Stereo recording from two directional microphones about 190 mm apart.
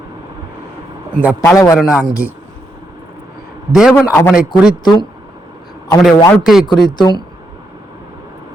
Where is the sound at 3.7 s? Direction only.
Centre (ahead or behind).